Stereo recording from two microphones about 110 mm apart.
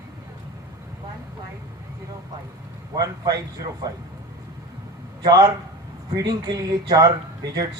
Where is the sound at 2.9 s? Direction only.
35° right (ahead or behind).